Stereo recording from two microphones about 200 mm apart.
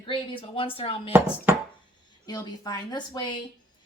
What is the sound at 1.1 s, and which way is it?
Chopping, 10° right (ahead or behind).